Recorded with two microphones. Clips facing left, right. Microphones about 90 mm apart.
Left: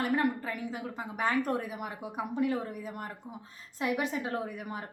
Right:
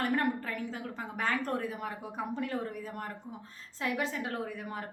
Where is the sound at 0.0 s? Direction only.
10° left (ahead or behind).